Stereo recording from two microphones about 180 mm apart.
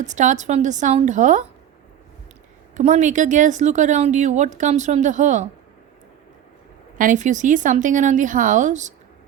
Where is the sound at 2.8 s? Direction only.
40° right (ahead or behind).